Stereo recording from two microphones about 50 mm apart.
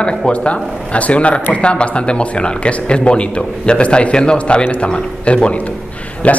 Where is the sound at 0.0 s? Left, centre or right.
Centre.